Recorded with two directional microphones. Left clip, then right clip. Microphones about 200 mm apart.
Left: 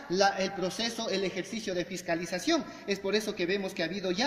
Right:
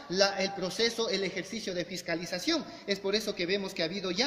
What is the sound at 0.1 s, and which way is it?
A man's voice, 40° right (ahead or behind).